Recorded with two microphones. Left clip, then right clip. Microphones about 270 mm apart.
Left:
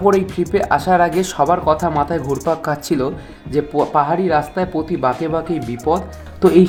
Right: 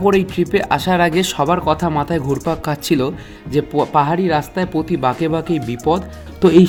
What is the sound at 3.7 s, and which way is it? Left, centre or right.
Speech, right.